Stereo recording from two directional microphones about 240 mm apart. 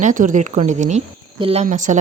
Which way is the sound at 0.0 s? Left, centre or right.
Right.